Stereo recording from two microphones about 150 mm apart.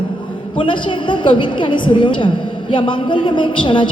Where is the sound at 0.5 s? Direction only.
35° left (ahead or behind).